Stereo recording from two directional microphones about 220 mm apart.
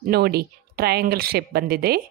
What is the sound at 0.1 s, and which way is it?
A woman's voice, 45° right (ahead or behind).